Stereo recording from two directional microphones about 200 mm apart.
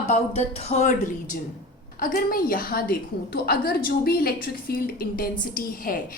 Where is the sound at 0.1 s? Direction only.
30° left (ahead or behind).